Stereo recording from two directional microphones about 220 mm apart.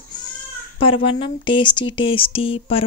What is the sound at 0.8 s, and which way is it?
A woman's voice, 25° left (ahead or behind).